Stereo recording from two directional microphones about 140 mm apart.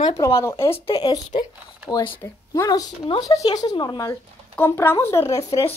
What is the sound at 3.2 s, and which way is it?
Speech, 25° left (ahead or behind).